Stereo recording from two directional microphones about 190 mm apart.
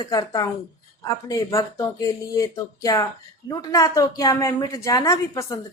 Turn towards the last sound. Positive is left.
turn(degrees=15)  # may be behind; listen again after turning